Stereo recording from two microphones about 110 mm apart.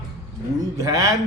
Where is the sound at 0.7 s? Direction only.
30° right (ahead or behind).